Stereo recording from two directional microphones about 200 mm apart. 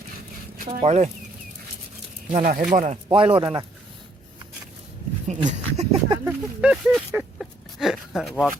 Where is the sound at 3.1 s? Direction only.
25° right (ahead or behind).